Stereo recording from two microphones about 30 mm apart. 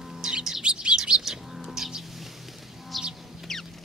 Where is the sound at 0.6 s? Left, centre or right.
Right.